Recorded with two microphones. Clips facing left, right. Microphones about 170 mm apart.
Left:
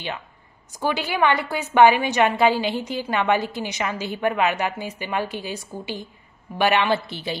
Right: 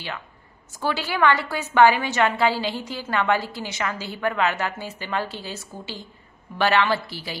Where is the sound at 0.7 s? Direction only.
15° left (ahead or behind).